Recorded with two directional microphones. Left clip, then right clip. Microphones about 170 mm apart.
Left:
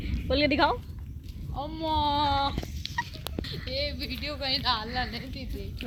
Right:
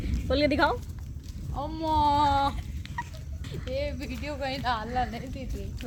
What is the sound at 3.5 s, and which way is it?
Speech, 65° right (ahead or behind).